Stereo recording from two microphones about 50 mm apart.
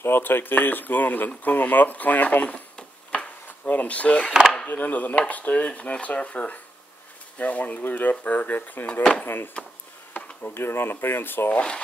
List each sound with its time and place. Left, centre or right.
0.0 s speech: left
3.1 s a sound: left
3.7 s speech: left
4.3 s speech: centre
4.6 s speech: left